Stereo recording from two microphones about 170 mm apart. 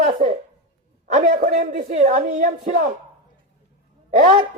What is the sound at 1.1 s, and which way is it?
A woman's voice, 50° right (ahead or behind).